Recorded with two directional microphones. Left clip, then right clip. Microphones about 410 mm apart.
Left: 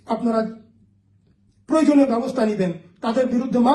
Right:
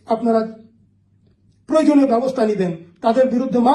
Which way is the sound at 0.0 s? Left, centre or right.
Centre.